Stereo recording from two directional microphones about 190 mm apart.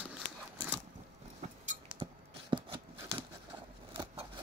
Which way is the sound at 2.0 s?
25° right (ahead or behind).